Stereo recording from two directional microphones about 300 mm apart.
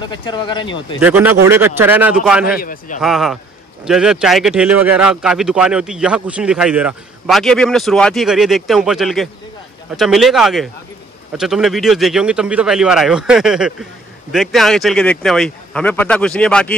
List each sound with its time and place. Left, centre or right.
0.0 s speech: centre
1.0 s a man's voice: centre
2.6 s a man's voice: left
3.0 s speech: centre